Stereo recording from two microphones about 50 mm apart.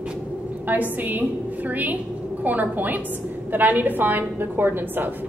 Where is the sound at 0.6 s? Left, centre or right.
Right.